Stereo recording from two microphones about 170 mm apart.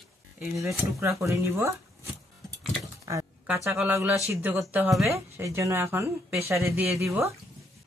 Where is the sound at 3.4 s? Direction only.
10° right (ahead or behind).